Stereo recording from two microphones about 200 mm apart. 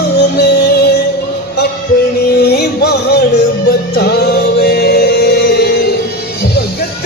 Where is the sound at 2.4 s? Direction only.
55° left (ahead or behind).